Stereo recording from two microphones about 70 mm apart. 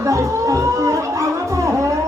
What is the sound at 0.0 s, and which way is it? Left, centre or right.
Music, right.